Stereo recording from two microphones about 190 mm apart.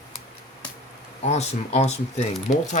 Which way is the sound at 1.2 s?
35° left (ahead or behind).